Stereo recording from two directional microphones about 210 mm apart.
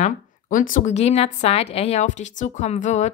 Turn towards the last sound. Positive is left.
turn(degrees=35)  # may be behind; listen again after turning